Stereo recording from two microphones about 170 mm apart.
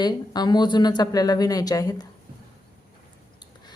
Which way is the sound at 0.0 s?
25° left (ahead or behind).